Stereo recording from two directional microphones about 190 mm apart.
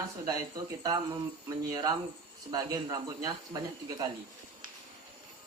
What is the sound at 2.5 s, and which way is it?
Speech, 20° right (ahead or behind).